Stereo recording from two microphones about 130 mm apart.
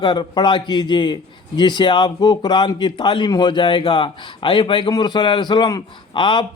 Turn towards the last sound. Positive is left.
turn(degrees=40)  # may be behind; listen again after turning